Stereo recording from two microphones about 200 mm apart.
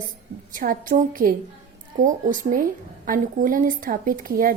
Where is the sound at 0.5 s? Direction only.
45° right (ahead or behind).